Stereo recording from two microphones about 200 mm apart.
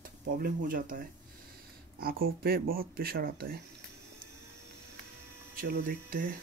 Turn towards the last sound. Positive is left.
turn(degrees=-45)  # may be behind; listen again after turning